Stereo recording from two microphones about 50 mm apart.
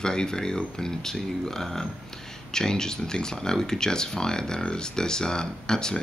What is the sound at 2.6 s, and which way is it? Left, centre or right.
Speech, centre.